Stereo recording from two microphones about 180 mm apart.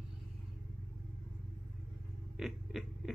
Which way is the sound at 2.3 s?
Centre (ahead or behind).